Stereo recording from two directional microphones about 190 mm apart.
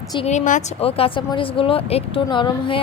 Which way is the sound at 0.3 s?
40° left (ahead or behind).